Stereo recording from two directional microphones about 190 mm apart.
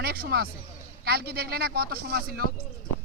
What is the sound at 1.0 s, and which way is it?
Speech, 55° right (ahead or behind).